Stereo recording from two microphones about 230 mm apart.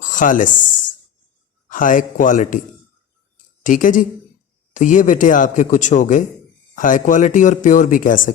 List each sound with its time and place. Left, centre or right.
0.0 s a sound: left
1.7 s speech: left
3.6 s speech: left